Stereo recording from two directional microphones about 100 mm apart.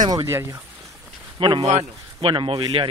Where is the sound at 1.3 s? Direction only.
55° right (ahead or behind).